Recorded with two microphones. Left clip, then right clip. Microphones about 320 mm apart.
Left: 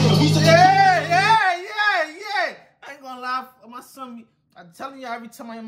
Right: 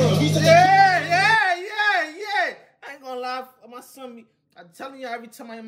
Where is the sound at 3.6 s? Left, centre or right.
Centre.